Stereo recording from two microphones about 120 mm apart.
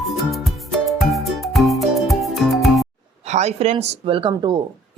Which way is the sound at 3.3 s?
70° right (ahead or behind).